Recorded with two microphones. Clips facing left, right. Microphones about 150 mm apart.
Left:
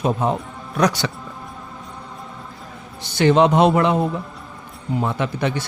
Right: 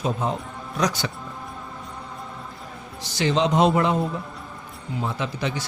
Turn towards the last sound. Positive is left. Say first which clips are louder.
# left 5 dB
turn(degrees=60)  # may be behind; listen again after turning